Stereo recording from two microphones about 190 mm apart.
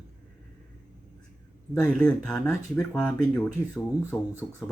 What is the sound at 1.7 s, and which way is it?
Speech, 5° left (ahead or behind).